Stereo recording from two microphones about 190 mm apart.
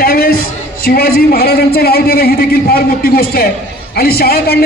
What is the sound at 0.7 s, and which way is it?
A man's voice, 55° left (ahead or behind).